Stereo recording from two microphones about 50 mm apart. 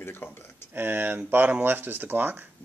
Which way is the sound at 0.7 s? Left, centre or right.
Right.